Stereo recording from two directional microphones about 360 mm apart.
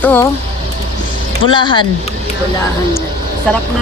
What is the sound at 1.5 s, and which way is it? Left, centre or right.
Speech, centre.